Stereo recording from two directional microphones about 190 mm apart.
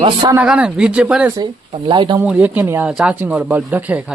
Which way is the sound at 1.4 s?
25° right (ahead or behind).